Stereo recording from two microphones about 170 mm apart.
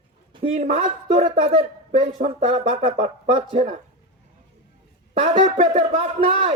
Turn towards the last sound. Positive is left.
turn(degrees=-35)  # may be behind; listen again after turning